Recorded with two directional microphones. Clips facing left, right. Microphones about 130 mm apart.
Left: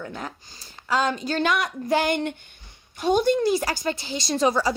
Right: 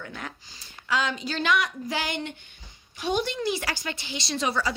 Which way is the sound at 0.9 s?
45° left (ahead or behind).